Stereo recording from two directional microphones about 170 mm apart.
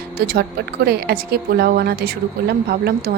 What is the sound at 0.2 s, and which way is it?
A woman's voice, 65° right (ahead or behind).